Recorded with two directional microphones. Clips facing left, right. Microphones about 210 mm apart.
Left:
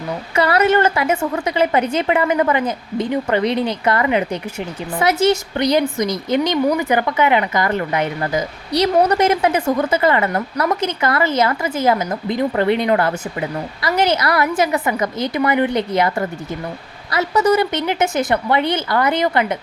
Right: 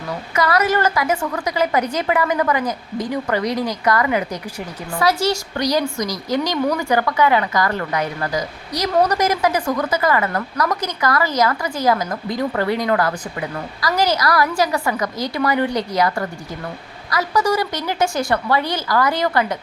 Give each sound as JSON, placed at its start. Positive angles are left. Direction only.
{"t": 0.3, "sound": "a woman's voice", "side_deg": 30}